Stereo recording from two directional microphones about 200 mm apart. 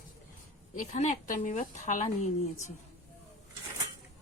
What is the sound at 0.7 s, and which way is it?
Speech, 35° left (ahead or behind).